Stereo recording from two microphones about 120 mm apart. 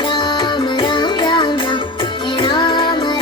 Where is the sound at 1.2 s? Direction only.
40° left (ahead or behind).